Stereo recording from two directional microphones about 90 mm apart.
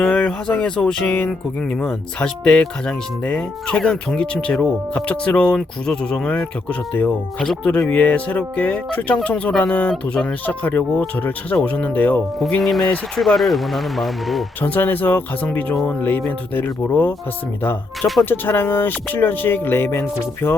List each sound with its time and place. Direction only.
0.0 s speech: 10° left (ahead or behind)
7.3 s speech: centre (ahead or behind)
7.6 s speech: 15° left (ahead or behind)
10.4 s speech: 20° left (ahead or behind)
12.5 s speech: 5° left (ahead or behind)
14.6 s speech: 20° left (ahead or behind)